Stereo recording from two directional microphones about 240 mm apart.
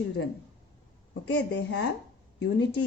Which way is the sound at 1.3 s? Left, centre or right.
Left.